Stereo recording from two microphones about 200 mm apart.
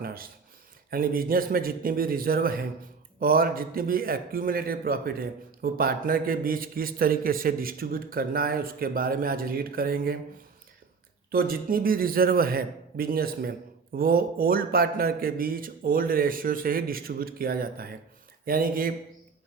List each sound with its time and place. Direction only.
0.0 s a man's voice: 45° right (ahead or behind)
11.3 s a man's voice: 45° right (ahead or behind)